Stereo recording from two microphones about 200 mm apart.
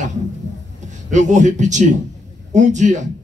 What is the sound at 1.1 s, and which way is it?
A man's voice, 35° right (ahead or behind).